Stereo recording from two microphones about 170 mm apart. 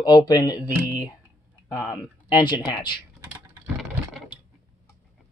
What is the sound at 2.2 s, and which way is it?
Speech, 25° left (ahead or behind).